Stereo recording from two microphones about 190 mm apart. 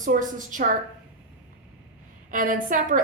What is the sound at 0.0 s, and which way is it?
Speech, 45° right (ahead or behind).